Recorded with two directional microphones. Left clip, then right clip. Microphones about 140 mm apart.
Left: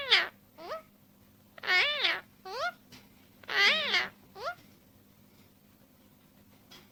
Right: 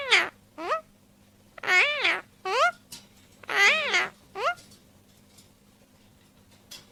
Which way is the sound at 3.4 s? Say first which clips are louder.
Right 5 dB; 30° right (ahead or behind).